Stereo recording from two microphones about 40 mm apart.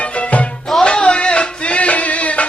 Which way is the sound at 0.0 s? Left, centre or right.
Left.